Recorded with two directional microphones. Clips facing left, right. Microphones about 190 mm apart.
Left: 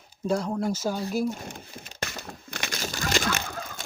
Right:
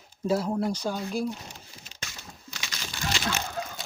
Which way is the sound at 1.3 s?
50° left (ahead or behind).